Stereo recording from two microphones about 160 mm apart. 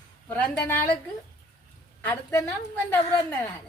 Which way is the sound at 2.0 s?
15° left (ahead or behind).